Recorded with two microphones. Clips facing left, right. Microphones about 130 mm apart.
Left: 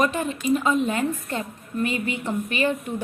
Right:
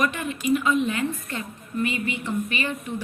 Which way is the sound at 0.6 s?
45° left (ahead or behind).